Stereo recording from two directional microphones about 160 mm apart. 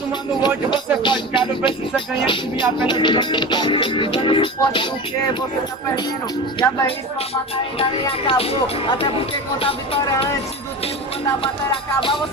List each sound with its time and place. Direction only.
0.1 s speech: 30° left (ahead or behind)
6.6 s speech: 35° left (ahead or behind)
11.4 s speech: 35° left (ahead or behind)